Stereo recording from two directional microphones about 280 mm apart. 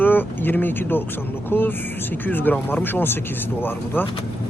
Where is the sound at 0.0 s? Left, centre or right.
Centre.